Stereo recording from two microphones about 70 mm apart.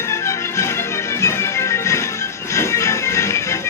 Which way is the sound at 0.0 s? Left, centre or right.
Left.